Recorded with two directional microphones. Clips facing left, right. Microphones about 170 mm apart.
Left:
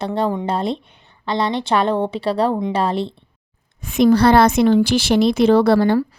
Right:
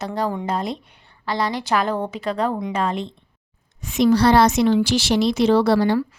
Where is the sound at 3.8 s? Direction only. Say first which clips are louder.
Left 3 dB; 55° left (ahead or behind).